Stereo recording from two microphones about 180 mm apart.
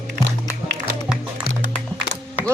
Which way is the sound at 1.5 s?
60° left (ahead or behind).